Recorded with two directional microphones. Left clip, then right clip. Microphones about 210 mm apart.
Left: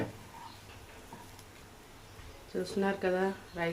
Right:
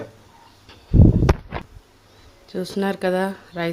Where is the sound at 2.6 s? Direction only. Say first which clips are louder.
Right 9 dB; 50° right (ahead or behind).